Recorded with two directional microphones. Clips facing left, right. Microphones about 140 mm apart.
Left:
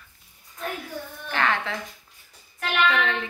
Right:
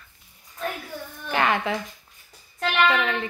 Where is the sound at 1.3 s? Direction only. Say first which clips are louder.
Right 3 dB; 15° right (ahead or behind).